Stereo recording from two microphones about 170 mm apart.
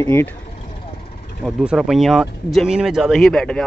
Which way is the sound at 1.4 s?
5° right (ahead or behind).